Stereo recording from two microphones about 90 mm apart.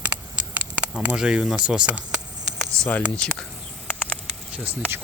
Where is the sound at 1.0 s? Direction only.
10° right (ahead or behind).